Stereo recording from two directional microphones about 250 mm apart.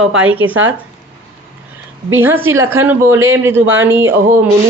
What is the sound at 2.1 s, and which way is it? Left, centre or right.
Speech, centre.